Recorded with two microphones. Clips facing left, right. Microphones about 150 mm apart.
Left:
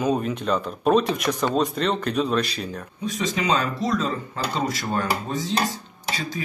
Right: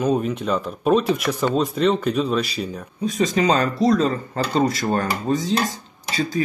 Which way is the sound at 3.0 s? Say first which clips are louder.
Right 6 dB; 35° right (ahead or behind).